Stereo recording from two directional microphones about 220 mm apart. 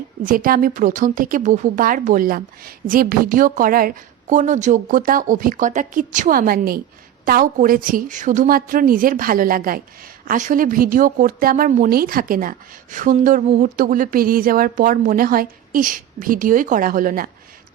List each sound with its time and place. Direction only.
0.2 s speech: 40° right (ahead or behind)